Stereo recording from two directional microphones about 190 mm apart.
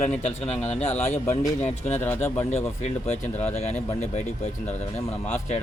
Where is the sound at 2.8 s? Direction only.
35° left (ahead or behind).